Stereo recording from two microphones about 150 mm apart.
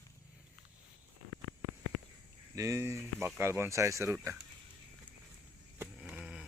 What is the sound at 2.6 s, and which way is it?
Speech, 20° right (ahead or behind).